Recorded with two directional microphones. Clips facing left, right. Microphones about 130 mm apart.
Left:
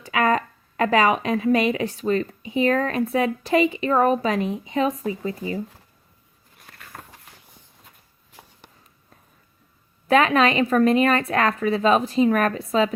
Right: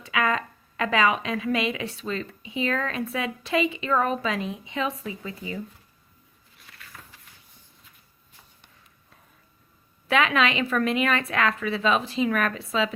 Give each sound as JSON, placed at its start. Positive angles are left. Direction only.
{"t": 0.1, "sound": "a woman's voice", "side_deg": 40}
{"t": 6.6, "sound": "a sound", "side_deg": 50}
{"t": 10.1, "sound": "speech", "side_deg": 40}